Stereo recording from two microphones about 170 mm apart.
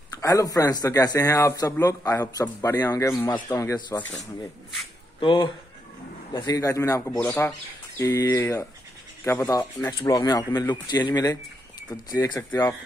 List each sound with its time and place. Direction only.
0.2 s speech: 20° left (ahead or behind)
4.0 s speech: centre (ahead or behind)
5.2 s speech: 30° left (ahead or behind)